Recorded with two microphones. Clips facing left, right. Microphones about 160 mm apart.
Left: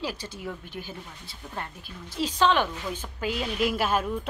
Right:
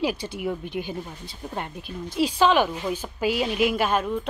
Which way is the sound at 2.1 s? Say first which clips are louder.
Right 4 dB; 10° right (ahead or behind).